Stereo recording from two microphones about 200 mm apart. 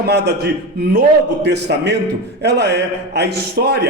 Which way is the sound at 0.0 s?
55° right (ahead or behind).